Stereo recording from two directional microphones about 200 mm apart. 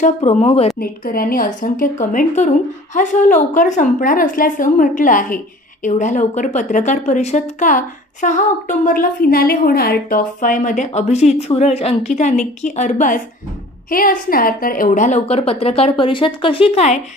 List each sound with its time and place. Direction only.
0.0 s a woman's voice: 35° left (ahead or behind)
0.7 s a woman's voice: 45° left (ahead or behind)